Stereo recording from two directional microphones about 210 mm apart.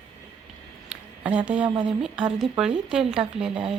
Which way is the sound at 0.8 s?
5° right (ahead or behind).